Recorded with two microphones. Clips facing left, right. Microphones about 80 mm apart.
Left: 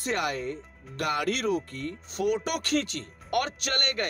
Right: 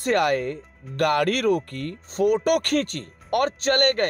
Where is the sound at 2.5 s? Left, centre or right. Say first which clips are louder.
Right 7 dB; right.